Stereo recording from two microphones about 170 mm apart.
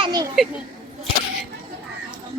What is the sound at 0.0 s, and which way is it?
Children playing, 25° right (ahead or behind).